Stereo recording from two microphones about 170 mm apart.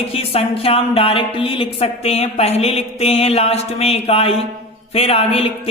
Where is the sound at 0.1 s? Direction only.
35° left (ahead or behind).